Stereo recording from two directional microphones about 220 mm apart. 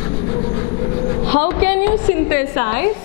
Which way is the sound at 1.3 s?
10° left (ahead or behind).